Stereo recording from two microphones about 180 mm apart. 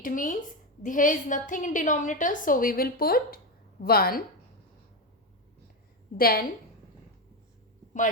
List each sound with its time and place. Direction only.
0.0 s a woman's voice: 50° left (ahead or behind)
6.1 s a woman's voice: 55° left (ahead or behind)